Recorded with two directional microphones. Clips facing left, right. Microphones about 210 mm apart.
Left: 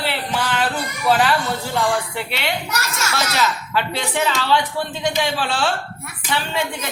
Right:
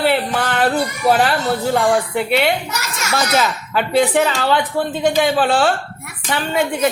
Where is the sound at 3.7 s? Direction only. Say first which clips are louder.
Right 9 dB; 55° right (ahead or behind).